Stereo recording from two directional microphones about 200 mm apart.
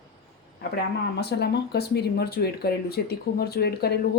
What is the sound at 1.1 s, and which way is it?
Speech, 55° left (ahead or behind).